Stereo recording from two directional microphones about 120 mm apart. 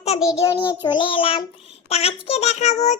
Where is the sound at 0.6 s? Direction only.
40° left (ahead or behind).